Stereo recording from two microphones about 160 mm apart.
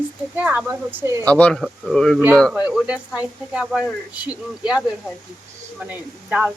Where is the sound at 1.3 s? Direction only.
10° left (ahead or behind).